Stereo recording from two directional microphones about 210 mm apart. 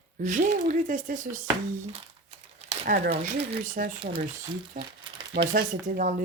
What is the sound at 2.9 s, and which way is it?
Speech, 40° right (ahead or behind).